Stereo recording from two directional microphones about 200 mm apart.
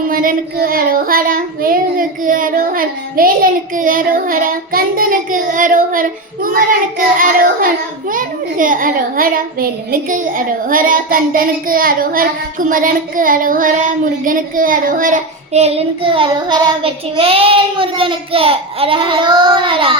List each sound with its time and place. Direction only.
0.1 s a child's voice: 45° right (ahead or behind); by 19.9 s 25° right (ahead or behind)